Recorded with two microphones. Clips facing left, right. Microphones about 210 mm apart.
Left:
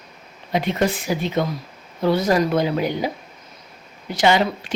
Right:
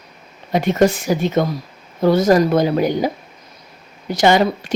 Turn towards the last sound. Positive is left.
turn(degrees=-45)  # may be behind; listen again after turning